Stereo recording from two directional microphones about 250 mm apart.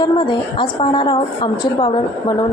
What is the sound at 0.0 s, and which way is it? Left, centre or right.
A woman's voice, centre.